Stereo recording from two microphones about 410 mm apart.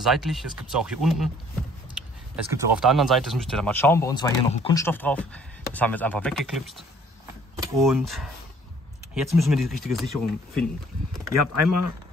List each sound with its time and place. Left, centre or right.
0.0 s speech: centre
11.3 s speech: right